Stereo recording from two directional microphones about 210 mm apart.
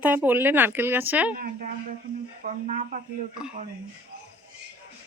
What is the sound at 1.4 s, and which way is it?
A woman's voice, 45° right (ahead or behind).